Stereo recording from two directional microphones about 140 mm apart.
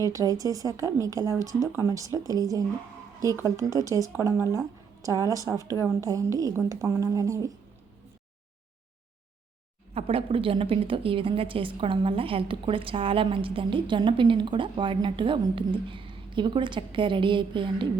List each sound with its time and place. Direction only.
0.0 s speech: 25° right (ahead or behind)
9.9 s a woman's voice: 40° right (ahead or behind)